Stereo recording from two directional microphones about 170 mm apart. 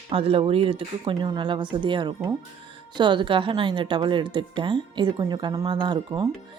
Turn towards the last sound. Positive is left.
turn(degrees=-25)  # may be behind; listen again after turning